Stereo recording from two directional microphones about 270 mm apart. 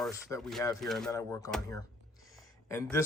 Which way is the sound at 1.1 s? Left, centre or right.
Centre.